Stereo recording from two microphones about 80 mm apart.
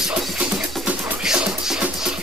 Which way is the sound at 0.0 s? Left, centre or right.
Centre.